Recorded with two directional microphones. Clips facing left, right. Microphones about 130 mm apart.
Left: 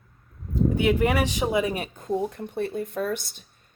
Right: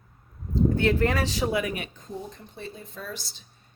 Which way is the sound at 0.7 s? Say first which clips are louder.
Left 4 dB; 15° left (ahead or behind).